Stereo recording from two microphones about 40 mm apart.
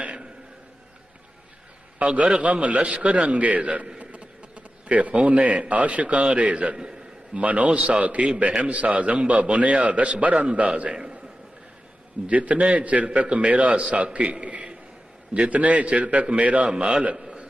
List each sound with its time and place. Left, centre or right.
0.0 s a sound: right
2.4 s a man's voice: right
7.7 s a man's voice: right
8.0 s a man's voice: right
12.3 s a man's voice: right
16.7 s a man's voice: right
17.2 s a sound: right